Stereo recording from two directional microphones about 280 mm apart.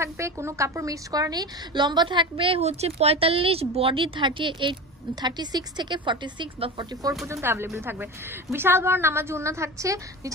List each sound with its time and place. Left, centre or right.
0.0 s a woman's voice: centre